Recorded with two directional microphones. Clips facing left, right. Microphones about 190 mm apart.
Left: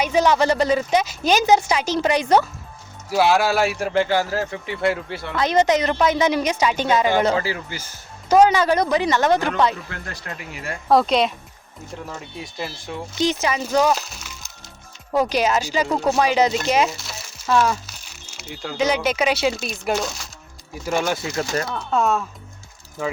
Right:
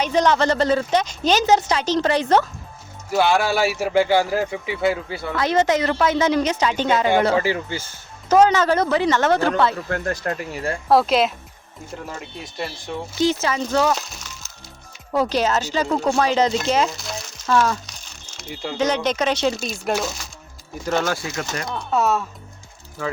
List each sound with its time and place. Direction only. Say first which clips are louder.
0.0 s speech: even; 10° left (ahead or behind)
3.1 s speech: left 1 dB; centre (ahead or behind)
5.4 s speech: left 1 dB; 15° left (ahead or behind)
7.4 s speech: right 5 dB; 25° right (ahead or behind)
8.3 s speech: even; 10° left (ahead or behind)
9.9 s speech: right 10 dB; 45° right (ahead or behind)
10.8 s speech: even; 5° right (ahead or behind)
13.1 s speech: right 1 dB; 15° left (ahead or behind)
13.9 s music: left 1 dB; 5° left (ahead or behind)
15.1 s speech: left 1 dB; 10° left (ahead or behind)
17.0 s frying: right 6 dB; 5° left (ahead or behind)
17.5 s speech: even; 10° left (ahead or behind)
20.8 s speech: even; 10° left (ahead or behind)
21.8 s speech: right 2 dB; 5° right (ahead or behind)